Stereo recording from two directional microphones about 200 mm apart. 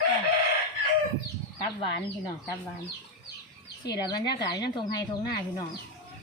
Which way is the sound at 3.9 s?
20° left (ahead or behind).